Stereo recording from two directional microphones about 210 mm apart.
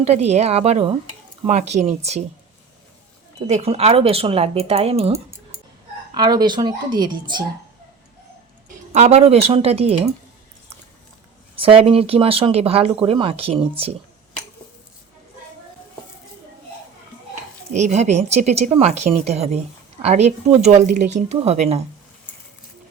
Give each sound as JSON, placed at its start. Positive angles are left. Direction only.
{"t": 0.0, "sound": "speech", "side_deg": -30}
{"t": 3.4, "sound": "speech", "side_deg": -30}
{"t": 6.1, "sound": "speech", "side_deg": -20}
{"t": 8.9, "sound": "speech", "side_deg": -30}
{"t": 11.5, "sound": "speech", "side_deg": -25}
{"t": 17.7, "sound": "speech", "side_deg": -35}